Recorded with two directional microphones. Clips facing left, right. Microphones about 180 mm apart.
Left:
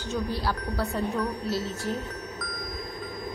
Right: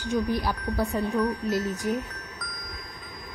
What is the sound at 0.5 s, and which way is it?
Speech, centre (ahead or behind).